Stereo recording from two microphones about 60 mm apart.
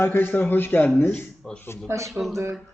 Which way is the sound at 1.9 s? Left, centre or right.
Right.